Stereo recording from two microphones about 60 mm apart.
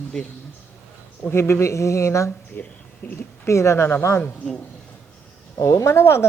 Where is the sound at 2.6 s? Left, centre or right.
Left.